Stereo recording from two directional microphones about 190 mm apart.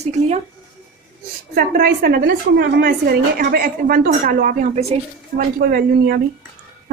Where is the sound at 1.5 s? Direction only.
55° right (ahead or behind).